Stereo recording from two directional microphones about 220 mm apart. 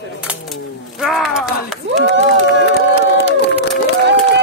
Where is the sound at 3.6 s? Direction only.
50° right (ahead or behind).